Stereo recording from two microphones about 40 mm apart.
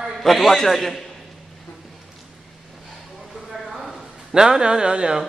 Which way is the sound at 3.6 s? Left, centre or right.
Centre.